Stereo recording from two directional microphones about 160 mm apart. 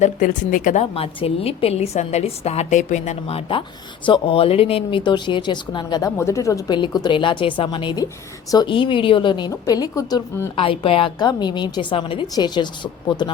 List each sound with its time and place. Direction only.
0.0 s a woman's voice: 55° left (ahead or behind); by 10.2 s 25° left (ahead or behind)
10.6 s a woman's voice: 35° left (ahead or behind)